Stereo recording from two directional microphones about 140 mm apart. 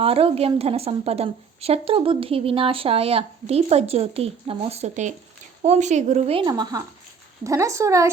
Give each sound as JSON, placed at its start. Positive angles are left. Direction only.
{"t": 0.0, "sound": "a woman's voice", "side_deg": -40}
{"t": 6.4, "sound": "speech", "side_deg": -30}